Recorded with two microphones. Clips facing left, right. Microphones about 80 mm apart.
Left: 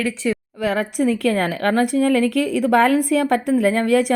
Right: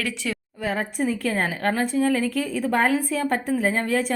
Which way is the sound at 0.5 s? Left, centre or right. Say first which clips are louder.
Left 3 dB; left.